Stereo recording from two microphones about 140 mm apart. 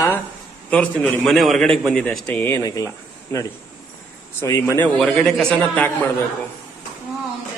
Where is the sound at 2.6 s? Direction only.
25° left (ahead or behind).